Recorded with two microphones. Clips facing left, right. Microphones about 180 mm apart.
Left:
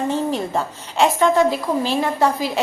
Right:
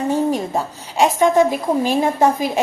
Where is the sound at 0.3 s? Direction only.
15° right (ahead or behind).